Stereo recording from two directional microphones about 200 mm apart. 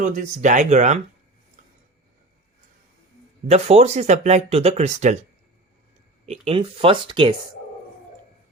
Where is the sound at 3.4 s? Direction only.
30° right (ahead or behind).